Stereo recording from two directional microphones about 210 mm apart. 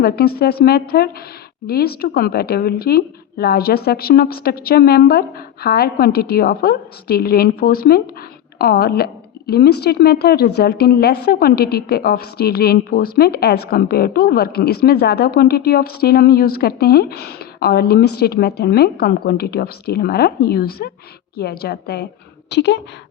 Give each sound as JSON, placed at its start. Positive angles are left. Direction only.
{"t": 0.0, "sound": "a woman's voice", "side_deg": 45}